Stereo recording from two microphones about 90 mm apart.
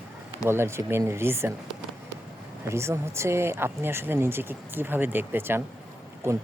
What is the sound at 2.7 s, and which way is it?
Speech, 30° right (ahead or behind).